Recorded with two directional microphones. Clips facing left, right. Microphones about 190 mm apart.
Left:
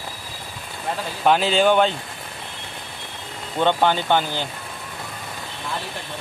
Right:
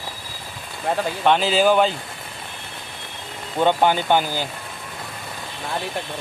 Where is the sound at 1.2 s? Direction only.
Centre (ahead or behind).